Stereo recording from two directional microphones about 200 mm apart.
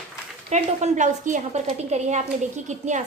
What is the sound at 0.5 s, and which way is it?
A woman's voice, 35° right (ahead or behind).